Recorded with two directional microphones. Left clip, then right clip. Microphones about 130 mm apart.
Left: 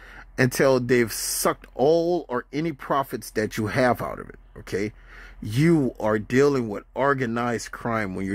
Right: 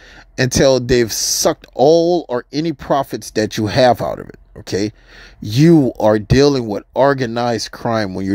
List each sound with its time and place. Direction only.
0.4 s speech: 15° right (ahead or behind)